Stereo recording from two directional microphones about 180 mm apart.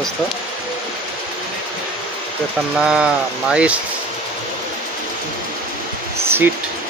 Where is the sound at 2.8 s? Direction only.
5° right (ahead or behind).